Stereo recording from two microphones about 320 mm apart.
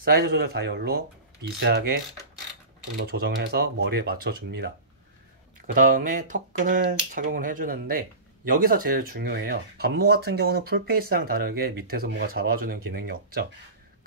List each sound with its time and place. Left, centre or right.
0.0 s speech: right
3.0 s speech: right
5.8 s speech: right